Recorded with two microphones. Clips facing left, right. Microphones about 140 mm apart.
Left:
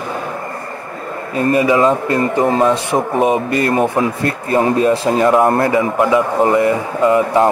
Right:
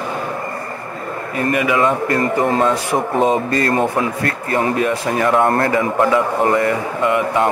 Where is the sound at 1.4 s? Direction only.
30° left (ahead or behind).